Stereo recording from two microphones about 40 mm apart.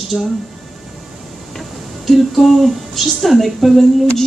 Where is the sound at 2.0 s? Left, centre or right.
Centre.